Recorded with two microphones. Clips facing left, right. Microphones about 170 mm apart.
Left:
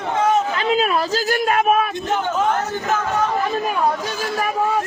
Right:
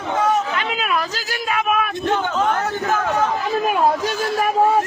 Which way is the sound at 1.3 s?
45° left (ahead or behind).